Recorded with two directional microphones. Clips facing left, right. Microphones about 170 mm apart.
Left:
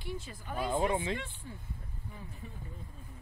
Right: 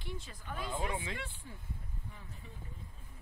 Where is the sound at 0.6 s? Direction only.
45° left (ahead or behind).